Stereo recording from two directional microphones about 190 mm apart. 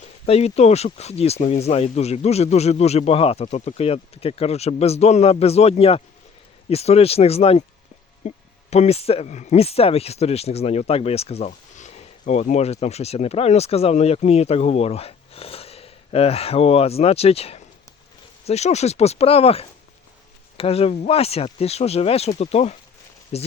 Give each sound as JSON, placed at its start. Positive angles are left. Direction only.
{"t": 0.3, "sound": "speech", "side_deg": 35}